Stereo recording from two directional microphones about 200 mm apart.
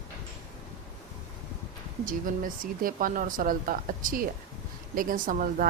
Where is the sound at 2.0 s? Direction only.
45° right (ahead or behind).